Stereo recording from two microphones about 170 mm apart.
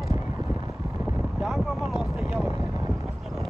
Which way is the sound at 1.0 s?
5° right (ahead or behind).